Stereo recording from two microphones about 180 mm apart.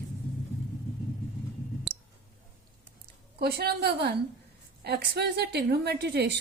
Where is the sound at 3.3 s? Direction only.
60° right (ahead or behind).